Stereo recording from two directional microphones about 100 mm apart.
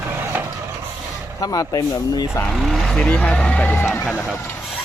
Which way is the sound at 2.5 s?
Centre (ahead or behind).